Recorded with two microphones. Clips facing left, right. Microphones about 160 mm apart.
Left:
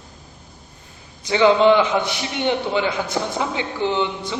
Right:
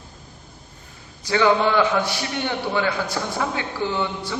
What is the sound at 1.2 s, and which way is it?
A man's voice, 20° left (ahead or behind).